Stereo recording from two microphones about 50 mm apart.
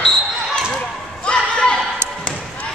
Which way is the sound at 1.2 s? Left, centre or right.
Centre.